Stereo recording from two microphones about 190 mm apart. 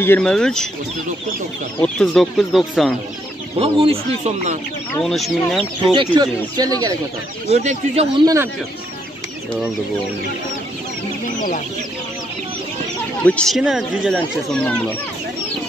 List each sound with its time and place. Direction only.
0.0 s speech: 5° left (ahead or behind)
1.8 s speech: 5° left (ahead or behind)
3.5 s speech: 30° right (ahead or behind)
5.0 s speech: centre (ahead or behind)
5.9 s speech: 25° right (ahead or behind)
7.5 s speech: 35° right (ahead or behind)
13.2 s speech: 5° left (ahead or behind)